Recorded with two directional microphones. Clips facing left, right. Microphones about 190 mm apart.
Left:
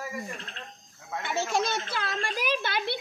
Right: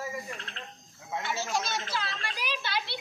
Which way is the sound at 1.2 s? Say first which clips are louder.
Left 5 dB; 55° left (ahead or behind).